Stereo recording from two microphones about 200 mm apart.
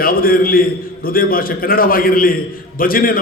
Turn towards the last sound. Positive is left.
turn(degrees=45)  # may be behind; listen again after turning